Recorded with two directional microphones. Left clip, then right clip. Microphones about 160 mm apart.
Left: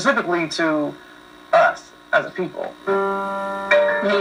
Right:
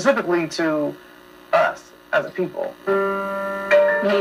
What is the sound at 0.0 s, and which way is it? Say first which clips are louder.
Speech: even; 30° right (ahead or behind).